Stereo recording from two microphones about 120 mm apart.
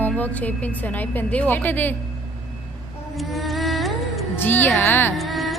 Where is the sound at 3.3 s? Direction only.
Centre (ahead or behind).